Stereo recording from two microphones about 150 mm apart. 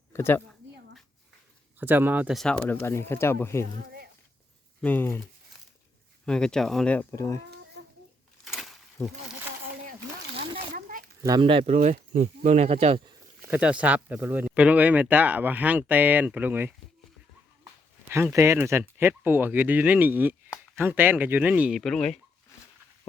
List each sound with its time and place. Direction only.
0.1 s speech: 15° left (ahead or behind)
1.8 s speech: 15° right (ahead or behind)
2.3 s speech: 5° left (ahead or behind)
4.8 s speech: 10° left (ahead or behind)
6.2 s speech: 5° left (ahead or behind)
10.8 s a sound: 65° right (ahead or behind)
11.3 s speech: 35° right (ahead or behind)
11.7 s speech: 55° right (ahead or behind)
13.5 s speech: 10° right (ahead or behind)
18.1 s speech: 15° right (ahead or behind); by 22.2 s 5° left (ahead or behind)